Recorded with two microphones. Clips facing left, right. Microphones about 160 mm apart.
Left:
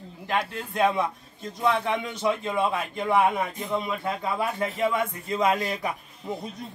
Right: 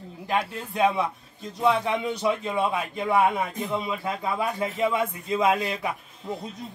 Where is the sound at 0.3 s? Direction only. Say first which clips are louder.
Right 1 dB; 5° right (ahead or behind).